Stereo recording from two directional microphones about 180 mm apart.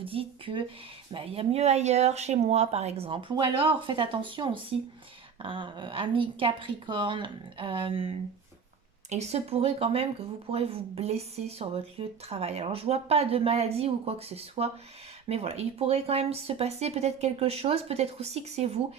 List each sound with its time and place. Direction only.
0.0 s speech: 30° right (ahead or behind)